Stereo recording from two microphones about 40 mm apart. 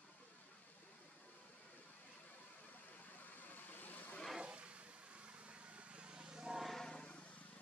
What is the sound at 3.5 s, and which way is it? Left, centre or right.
Vehicle, left.